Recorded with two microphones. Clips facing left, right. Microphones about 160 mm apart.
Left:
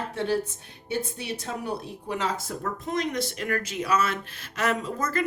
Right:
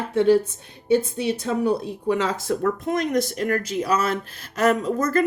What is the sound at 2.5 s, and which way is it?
Speech, 60° right (ahead or behind).